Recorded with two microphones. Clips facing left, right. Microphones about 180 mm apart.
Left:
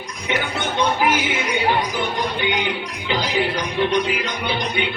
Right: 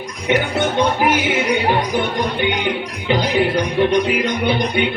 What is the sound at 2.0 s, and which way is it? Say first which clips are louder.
Speech: right 4 dB; 55° right (ahead or behind).